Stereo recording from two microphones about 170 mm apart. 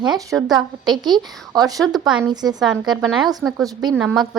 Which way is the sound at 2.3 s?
25° right (ahead or behind).